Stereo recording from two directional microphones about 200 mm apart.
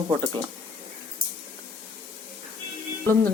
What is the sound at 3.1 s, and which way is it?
Speech, 10° left (ahead or behind).